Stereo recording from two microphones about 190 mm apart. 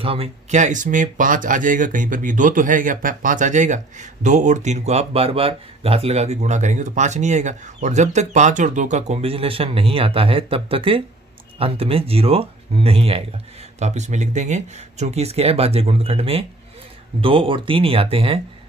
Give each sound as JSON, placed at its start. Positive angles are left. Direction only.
{"t": 0.0, "sound": "speech", "side_deg": -30}